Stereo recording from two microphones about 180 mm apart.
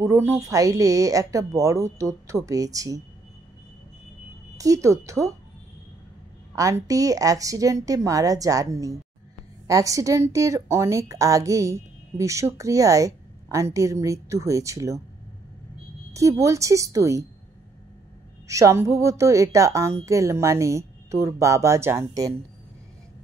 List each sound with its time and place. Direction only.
0.0 s a woman's voice: 15° right (ahead or behind)
4.6 s a woman's voice: 20° right (ahead or behind)
6.5 s a woman's voice: 20° right (ahead or behind)
16.1 s a woman's voice: 15° right (ahead or behind)
18.5 s a woman's voice: 15° right (ahead or behind)